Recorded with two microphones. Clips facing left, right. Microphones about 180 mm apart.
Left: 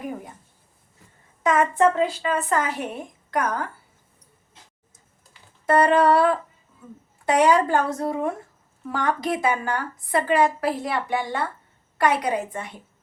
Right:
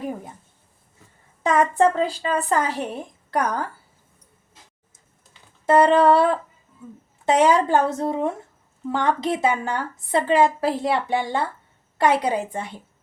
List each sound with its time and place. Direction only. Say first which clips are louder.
1.5 s a woman's voice: right 1 dB; 35° right (ahead or behind)
5.3 s a sound: right 3 dB; 25° right (ahead or behind)
7.3 s a woman's voice: right 1 dB; 25° right (ahead or behind)